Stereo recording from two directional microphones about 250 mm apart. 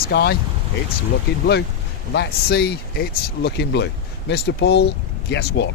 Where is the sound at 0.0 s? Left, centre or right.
Left.